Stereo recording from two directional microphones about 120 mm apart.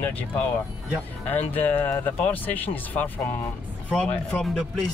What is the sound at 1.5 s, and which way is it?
Speech, 15° left (ahead or behind).